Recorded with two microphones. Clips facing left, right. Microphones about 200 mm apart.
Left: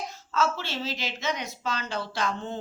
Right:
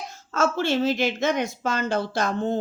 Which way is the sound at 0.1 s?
50° right (ahead or behind).